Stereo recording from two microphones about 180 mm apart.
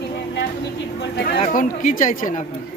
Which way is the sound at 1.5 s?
45° left (ahead or behind).